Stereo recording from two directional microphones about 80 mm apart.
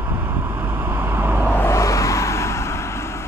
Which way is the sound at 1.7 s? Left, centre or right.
Left.